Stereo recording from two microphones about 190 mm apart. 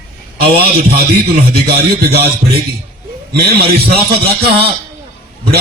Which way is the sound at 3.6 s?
55° right (ahead or behind).